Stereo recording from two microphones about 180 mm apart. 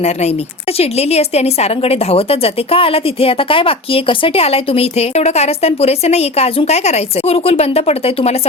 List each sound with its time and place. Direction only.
0.0 s a woman's voice: 35° left (ahead or behind)